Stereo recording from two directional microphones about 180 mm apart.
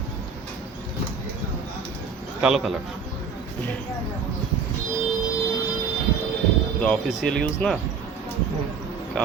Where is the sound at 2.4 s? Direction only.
Centre (ahead or behind).